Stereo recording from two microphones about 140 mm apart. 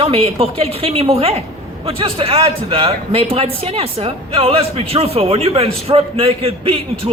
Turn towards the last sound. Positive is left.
turn(degrees=-45)  # may be behind; listen again after turning